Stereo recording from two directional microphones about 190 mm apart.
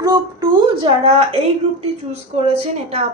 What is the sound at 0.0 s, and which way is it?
A woman's voice, 20° right (ahead or behind).